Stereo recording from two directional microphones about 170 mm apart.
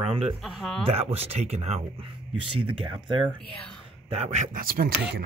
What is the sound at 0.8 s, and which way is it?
Speech, 35° right (ahead or behind).